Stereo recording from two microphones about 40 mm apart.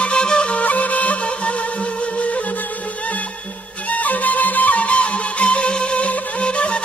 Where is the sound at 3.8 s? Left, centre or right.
Left.